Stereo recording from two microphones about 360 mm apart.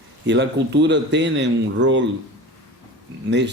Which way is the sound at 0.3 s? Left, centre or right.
Right.